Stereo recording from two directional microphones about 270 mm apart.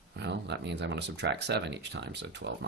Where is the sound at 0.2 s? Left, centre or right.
Right.